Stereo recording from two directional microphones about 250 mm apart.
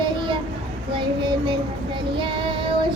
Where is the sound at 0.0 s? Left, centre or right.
Centre.